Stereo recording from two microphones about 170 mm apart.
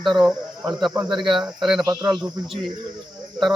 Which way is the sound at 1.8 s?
25° right (ahead or behind).